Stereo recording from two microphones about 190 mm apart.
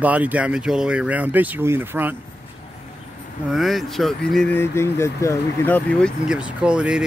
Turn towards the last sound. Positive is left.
turn(degrees=-5)  # may be behind; listen again after turning